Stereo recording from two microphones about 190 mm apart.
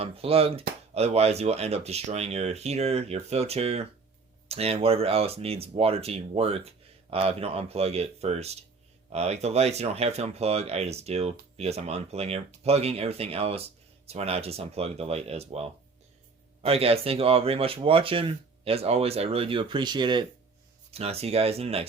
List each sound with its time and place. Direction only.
0.0 s speech: 30° right (ahead or behind)